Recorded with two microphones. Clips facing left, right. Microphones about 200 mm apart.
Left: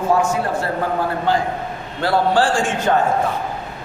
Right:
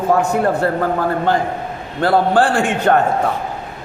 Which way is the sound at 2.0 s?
55° right (ahead or behind).